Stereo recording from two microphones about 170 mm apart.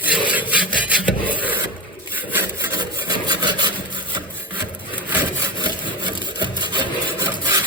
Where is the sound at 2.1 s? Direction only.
10° right (ahead or behind).